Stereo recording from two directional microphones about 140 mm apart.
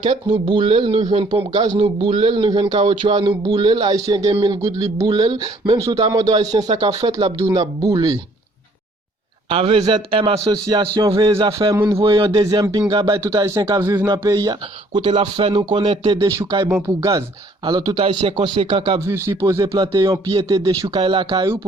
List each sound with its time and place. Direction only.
0.0 s a man's voice: 35° right (ahead or behind)
9.5 s a man's voice: 40° right (ahead or behind)
11.3 s a man's voice: 40° right (ahead or behind)
11.7 s speech: 20° right (ahead or behind)
11.9 s a man's voice: 40° right (ahead or behind)
12.3 s speech: 25° right (ahead or behind)
14.1 s a man's voice: 30° right (ahead or behind)
18.9 s a man's voice: 20° right (ahead or behind)